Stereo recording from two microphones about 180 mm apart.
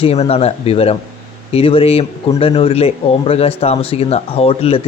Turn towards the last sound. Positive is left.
turn(degrees=35)  # may be behind; listen again after turning